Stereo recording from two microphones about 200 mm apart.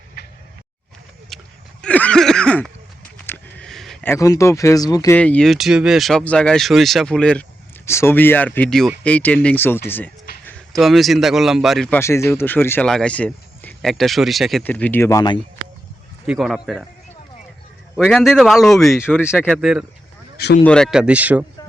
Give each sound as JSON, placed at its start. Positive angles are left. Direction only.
{"t": 1.3, "sound": "a sound", "side_deg": 0}
{"t": 4.1, "sound": "a man's voice", "side_deg": 15}
{"t": 11.9, "sound": "speech", "side_deg": 15}
{"t": 16.2, "sound": "speech", "side_deg": -5}
{"t": 17.9, "sound": "speech", "side_deg": 0}
{"t": 20.3, "sound": "a sound", "side_deg": 55}
{"t": 20.7, "sound": "speech", "side_deg": 5}